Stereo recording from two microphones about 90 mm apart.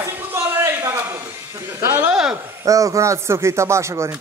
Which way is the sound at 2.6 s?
40° right (ahead or behind).